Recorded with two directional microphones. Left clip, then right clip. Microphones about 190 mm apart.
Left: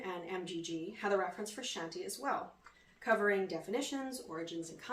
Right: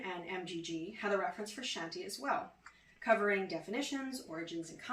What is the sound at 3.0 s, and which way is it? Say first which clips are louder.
Speech: even; 20° left (ahead or behind).